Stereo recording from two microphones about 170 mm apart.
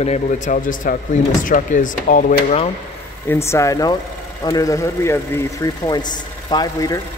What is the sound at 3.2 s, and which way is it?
A man's voice, 15° left (ahead or behind).